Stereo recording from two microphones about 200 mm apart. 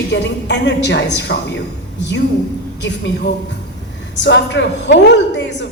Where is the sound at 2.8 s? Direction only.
60° left (ahead or behind).